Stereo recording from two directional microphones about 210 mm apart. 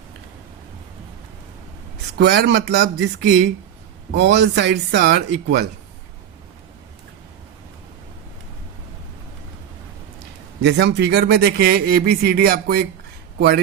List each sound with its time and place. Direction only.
2.1 s speech: 50° right (ahead or behind)
10.6 s speech: 55° right (ahead or behind)